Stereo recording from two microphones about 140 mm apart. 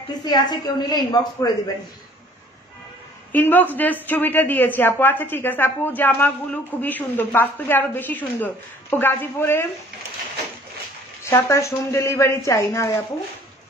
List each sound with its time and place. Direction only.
0.2 s a woman's voice: 30° left (ahead or behind)
3.3 s a man's voice: 15° left (ahead or behind)
11.2 s speech: 20° left (ahead or behind)